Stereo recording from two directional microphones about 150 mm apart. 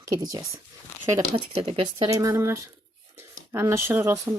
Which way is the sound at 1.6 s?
40° right (ahead or behind).